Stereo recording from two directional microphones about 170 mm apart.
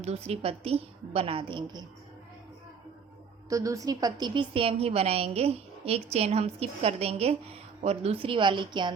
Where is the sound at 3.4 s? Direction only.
20° right (ahead or behind).